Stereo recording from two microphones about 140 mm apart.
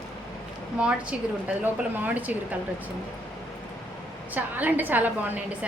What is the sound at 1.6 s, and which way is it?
Speech, 15° right (ahead or behind).